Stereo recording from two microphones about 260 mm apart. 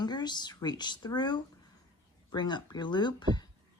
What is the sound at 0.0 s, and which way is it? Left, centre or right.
Speech, centre.